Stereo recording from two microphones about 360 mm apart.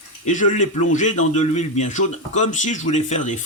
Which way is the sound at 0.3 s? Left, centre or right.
Left.